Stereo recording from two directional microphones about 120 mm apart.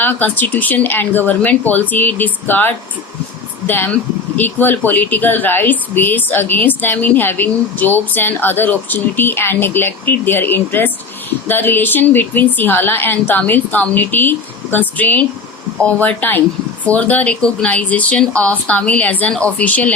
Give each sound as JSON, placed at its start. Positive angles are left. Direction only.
{"t": 0.0, "sound": "speech", "side_deg": 15}